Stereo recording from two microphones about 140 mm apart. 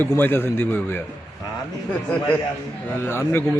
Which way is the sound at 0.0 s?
15° left (ahead or behind).